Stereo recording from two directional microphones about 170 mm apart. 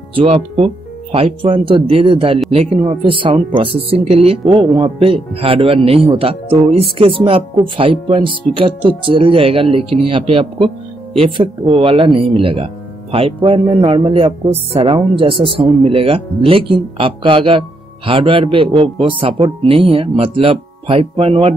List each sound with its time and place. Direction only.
0.2 s speech: 35° right (ahead or behind)